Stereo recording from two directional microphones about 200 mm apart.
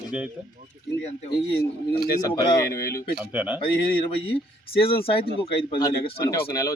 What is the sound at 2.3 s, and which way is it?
Speech, 15° left (ahead or behind).